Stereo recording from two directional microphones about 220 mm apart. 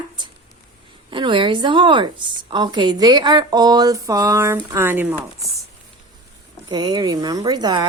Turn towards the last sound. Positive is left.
turn(degrees=-20)  # may be behind; listen again after turning